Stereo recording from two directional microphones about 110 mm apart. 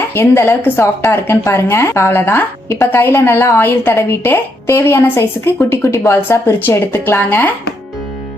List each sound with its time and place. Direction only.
0.1 s a woman's voice: 20° left (ahead or behind)